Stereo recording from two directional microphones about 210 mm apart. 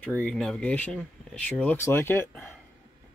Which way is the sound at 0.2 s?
5° left (ahead or behind).